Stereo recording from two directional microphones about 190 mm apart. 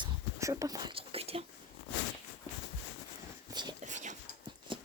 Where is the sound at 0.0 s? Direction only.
15° right (ahead or behind); by 1.5 s 30° right (ahead or behind).